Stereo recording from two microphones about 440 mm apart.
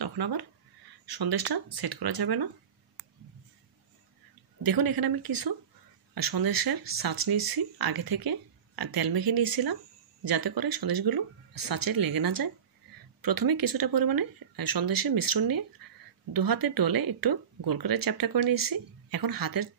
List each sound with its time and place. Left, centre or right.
0.0 s speech: right
4.6 s speech: right